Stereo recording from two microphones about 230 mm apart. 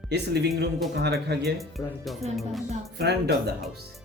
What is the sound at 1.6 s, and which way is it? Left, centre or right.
Speech, centre.